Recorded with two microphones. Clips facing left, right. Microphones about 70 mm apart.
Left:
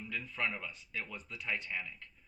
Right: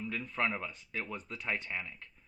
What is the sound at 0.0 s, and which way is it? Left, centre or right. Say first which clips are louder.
Speech: right 4 dB; right.